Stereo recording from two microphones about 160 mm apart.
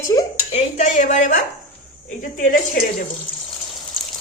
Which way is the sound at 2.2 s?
65° left (ahead or behind).